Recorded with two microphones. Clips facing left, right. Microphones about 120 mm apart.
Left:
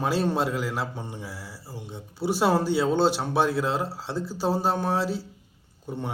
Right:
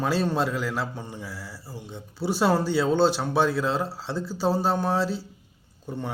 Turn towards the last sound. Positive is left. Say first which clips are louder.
# even
turn(degrees=20)  # may be behind; listen again after turning